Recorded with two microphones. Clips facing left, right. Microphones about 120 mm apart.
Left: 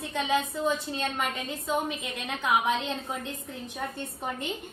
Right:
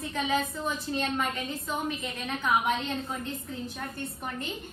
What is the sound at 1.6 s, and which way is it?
Speech, 65° left (ahead or behind).